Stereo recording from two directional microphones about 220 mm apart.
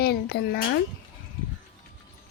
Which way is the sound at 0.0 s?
45° left (ahead or behind).